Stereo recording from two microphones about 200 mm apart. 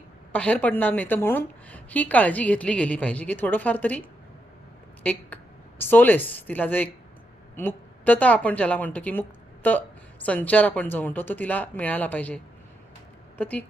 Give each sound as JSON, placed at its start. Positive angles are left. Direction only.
{"t": 0.3, "sound": "a woman's voice", "side_deg": 5}
{"t": 5.0, "sound": "a woman's voice", "side_deg": 10}
{"t": 13.4, "sound": "a woman's voice", "side_deg": 10}